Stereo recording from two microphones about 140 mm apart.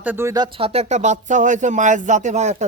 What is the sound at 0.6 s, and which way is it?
Speech, 45° right (ahead or behind).